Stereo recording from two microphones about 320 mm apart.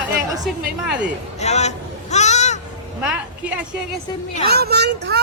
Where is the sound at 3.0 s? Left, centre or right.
Centre.